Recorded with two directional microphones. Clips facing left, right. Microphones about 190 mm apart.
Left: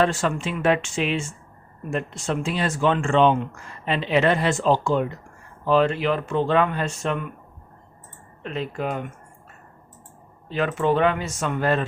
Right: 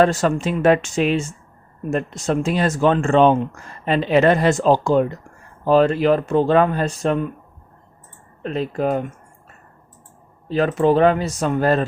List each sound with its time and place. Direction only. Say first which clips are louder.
0.0 s speech: right 5 dB; 40° right (ahead or behind)
8.4 s speech: right 6 dB; 40° right (ahead or behind)
10.5 s speech: right 5 dB; 35° right (ahead or behind)